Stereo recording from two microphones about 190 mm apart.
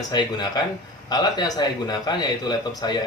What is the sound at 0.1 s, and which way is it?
A man's voice, 20° left (ahead or behind).